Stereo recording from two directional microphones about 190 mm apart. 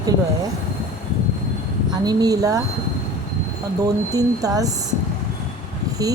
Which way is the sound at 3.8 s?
20° right (ahead or behind).